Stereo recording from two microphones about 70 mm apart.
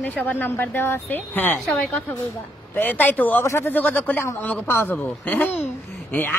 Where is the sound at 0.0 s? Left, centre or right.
Left.